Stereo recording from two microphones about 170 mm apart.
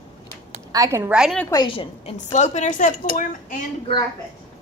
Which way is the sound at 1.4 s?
25° left (ahead or behind).